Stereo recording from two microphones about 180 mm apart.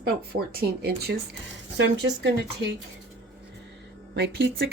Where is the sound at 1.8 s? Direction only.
75° right (ahead or behind).